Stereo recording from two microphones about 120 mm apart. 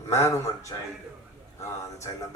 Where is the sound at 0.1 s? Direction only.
25° left (ahead or behind).